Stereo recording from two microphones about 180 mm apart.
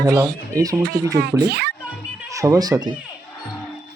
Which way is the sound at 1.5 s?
65° right (ahead or behind).